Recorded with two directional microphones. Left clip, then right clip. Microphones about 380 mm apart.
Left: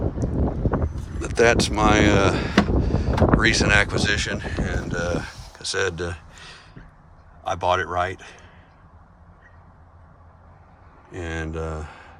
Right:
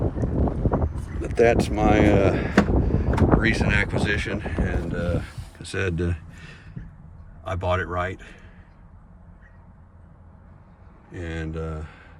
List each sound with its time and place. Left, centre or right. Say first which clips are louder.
0.2 s boat: even; left
0.7 s wind: right 1 dB; centre
1.2 s speech: left 1 dB; centre
5.6 s a sound: left 3 dB; centre
7.4 s a man's voice: left 4 dB; centre
11.1 s speech: left 3 dB; centre